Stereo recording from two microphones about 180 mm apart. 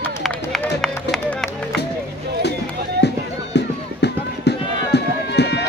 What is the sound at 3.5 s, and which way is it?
Run, 70° left (ahead or behind).